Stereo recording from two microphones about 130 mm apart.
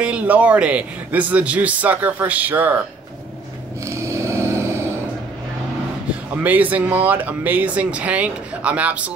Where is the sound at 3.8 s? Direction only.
20° right (ahead or behind).